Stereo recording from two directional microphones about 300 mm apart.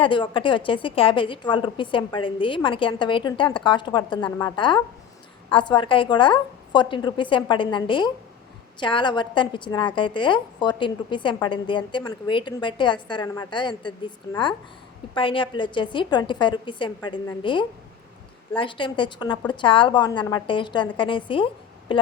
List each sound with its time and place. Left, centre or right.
0.0 s a woman's voice: centre